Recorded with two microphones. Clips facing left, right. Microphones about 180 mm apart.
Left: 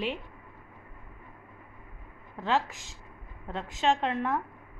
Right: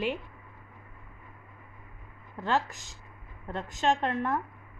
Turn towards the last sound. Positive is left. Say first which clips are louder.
# even
turn(degrees=0)  # may be behind; listen again after turning